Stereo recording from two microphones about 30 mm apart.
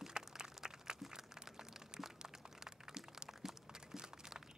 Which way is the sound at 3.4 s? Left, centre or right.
Centre.